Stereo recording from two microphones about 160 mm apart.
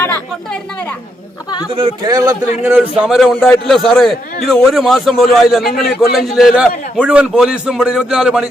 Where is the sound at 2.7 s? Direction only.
10° right (ahead or behind).